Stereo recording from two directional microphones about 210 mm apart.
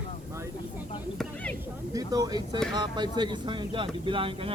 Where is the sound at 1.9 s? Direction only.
15° right (ahead or behind).